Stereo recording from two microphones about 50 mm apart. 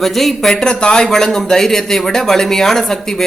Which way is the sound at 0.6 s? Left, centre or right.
Centre.